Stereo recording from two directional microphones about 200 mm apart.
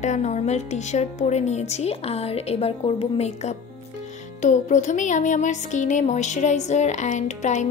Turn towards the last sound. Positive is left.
turn(degrees=35)  # may be behind; listen again after turning